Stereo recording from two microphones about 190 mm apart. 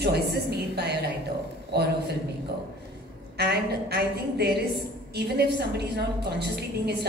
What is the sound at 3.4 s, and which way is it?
A woman's voice, 60° right (ahead or behind).